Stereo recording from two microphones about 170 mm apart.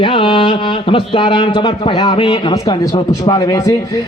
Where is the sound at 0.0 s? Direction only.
30° left (ahead or behind).